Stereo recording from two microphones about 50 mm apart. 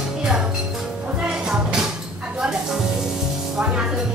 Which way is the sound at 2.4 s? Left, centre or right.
Centre.